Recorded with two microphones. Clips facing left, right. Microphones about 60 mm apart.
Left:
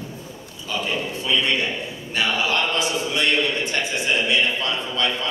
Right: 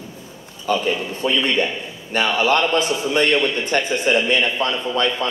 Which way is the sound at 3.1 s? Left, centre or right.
Right.